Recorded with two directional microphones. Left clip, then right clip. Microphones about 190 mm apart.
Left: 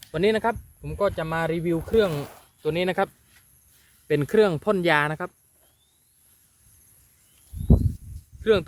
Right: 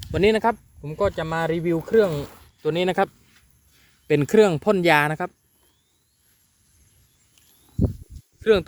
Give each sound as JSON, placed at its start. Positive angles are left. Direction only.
{"t": 0.1, "sound": "speech", "side_deg": -40}
{"t": 0.8, "sound": "speech", "side_deg": -25}
{"t": 4.1, "sound": "speech", "side_deg": -30}
{"t": 8.4, "sound": "speech", "side_deg": -35}